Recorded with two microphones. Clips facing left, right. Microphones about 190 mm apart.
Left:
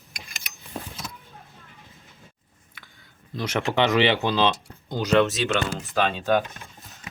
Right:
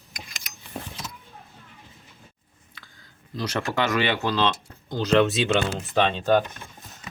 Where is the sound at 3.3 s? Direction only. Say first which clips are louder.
Left 3 dB; 20° left (ahead or behind).